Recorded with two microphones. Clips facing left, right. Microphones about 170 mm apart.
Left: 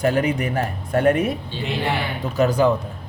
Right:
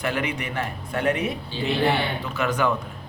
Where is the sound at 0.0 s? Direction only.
40° left (ahead or behind).